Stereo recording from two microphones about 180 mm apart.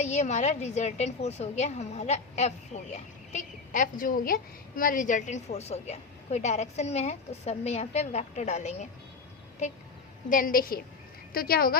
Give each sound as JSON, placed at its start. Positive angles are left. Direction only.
{"t": 0.0, "sound": "a woman's voice", "side_deg": 40}
{"t": 10.2, "sound": "a woman's voice", "side_deg": 50}